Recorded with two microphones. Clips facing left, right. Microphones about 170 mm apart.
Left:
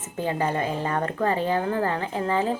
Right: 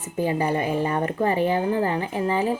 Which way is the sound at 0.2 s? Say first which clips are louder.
Right 2 dB; 15° right (ahead or behind).